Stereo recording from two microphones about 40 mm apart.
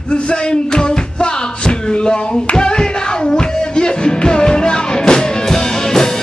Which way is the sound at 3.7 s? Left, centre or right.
Left.